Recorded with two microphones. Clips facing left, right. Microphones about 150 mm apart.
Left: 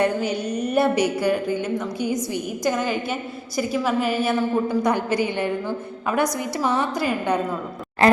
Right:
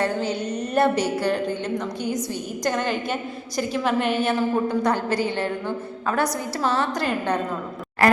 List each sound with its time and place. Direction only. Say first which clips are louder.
0.0 s a woman's voice: left 2 dB; 15° left (ahead or behind)
6.6 s a woman's voice: left 1 dB; 15° left (ahead or behind)
8.0 s a sound: left 2 dB; 20° left (ahead or behind)